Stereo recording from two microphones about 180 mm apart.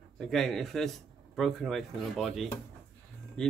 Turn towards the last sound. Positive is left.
turn(degrees=5)  # may be behind; listen again after turning